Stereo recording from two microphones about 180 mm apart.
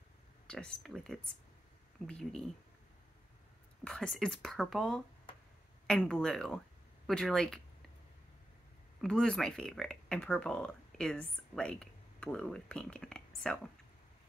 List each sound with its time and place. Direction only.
0.5 s speech: 5° left (ahead or behind)
3.8 s speech: 5° left (ahead or behind)
9.0 s speech: 5° left (ahead or behind)